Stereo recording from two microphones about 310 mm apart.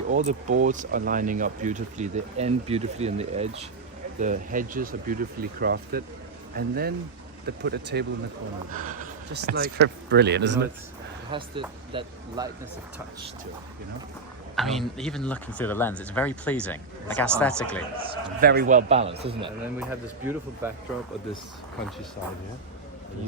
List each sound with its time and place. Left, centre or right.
0.1 s speech: right
11.3 s speech: centre
14.5 s speech: centre
18.3 s speech: right; by 20.7 s centre